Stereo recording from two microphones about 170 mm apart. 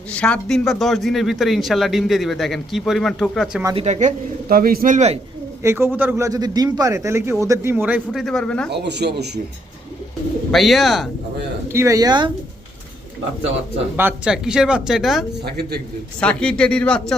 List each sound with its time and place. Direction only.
0.1 s speech: 5° left (ahead or behind)
3.8 s speech: 40° right (ahead or behind)
4.4 s a man's voice: 60° right (ahead or behind)
5.6 s speech: 15° right (ahead or behind)
8.2 s speech: 5° left (ahead or behind)
8.7 s speech: 85° right
10.5 s speech: centre (ahead or behind)
11.7 s speech: 15° right (ahead or behind)
13.9 s speech: 10° right (ahead or behind)
15.4 s a man's voice: 70° right (ahead or behind)
16.2 s speech: 5° left (ahead or behind)